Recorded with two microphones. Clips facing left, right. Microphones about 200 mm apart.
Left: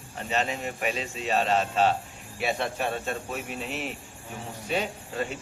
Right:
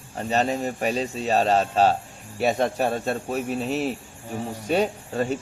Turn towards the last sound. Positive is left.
turn(degrees=-40)  # may be behind; listen again after turning